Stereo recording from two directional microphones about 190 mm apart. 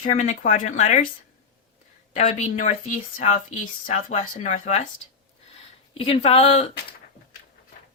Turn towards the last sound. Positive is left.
turn(degrees=35)  # may be behind; listen again after turning